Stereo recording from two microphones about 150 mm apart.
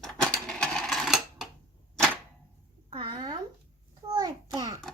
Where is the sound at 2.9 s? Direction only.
30° right (ahead or behind).